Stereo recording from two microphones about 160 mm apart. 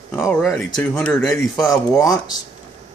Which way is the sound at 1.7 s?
20° left (ahead or behind).